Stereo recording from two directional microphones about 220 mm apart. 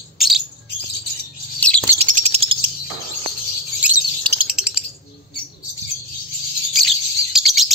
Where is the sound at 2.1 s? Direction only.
30° right (ahead or behind).